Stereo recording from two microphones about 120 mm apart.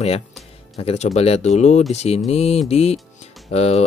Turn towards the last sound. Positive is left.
turn(degrees=60)  # may be behind; listen again after turning